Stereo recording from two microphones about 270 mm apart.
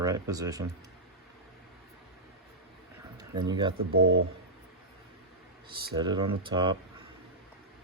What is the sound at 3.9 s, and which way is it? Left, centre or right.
Speech, right.